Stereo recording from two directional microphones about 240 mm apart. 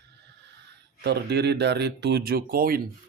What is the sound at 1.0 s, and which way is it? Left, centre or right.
Speech, right.